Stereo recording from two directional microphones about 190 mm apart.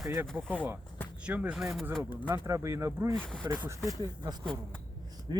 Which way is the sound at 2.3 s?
15° right (ahead or behind).